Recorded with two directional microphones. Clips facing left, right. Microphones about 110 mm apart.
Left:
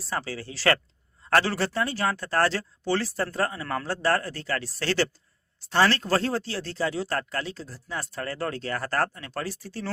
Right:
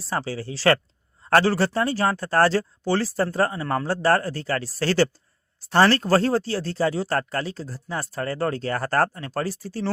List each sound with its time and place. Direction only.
0.1 s speech: 30° right (ahead or behind)